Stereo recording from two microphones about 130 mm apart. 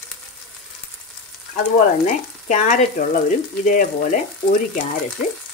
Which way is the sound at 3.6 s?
90° left.